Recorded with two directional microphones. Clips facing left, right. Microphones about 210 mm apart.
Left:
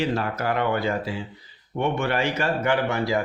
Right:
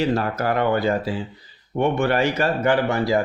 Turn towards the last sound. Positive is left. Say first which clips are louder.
# right 3 dB
turn(degrees=-35)  # may be behind; listen again after turning